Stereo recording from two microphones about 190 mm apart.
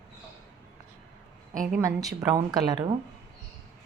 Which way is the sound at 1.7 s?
15° right (ahead or behind).